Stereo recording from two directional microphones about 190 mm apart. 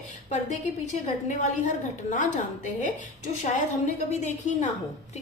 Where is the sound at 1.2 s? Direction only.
40° left (ahead or behind).